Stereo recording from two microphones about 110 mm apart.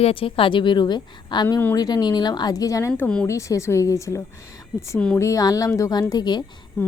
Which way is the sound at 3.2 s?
25° left (ahead or behind).